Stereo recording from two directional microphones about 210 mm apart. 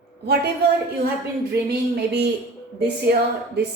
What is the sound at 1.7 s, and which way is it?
Speech, 50° right (ahead or behind).